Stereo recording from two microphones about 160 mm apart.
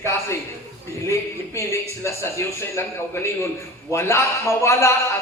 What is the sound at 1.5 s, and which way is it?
A man's voice, 20° left (ahead or behind).